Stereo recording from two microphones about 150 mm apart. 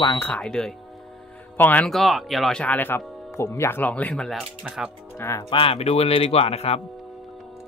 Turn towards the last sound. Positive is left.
turn(degrees=40)  # may be behind; listen again after turning